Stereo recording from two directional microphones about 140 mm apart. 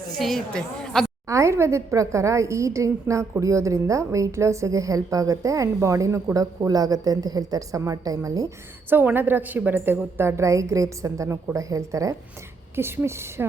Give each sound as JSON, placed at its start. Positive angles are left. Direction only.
{"t": 0.2, "sound": "a woman's voice", "side_deg": 0}
{"t": 1.3, "sound": "a woman's voice", "side_deg": -20}
{"t": 8.9, "sound": "a woman's voice", "side_deg": -15}